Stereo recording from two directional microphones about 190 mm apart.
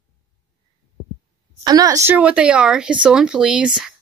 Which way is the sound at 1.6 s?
20° right (ahead or behind).